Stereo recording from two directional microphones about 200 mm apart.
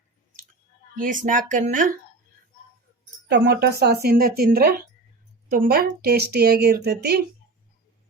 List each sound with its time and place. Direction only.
1.2 s speech: 40° right (ahead or behind)
3.2 s speech: 55° right (ahead or behind)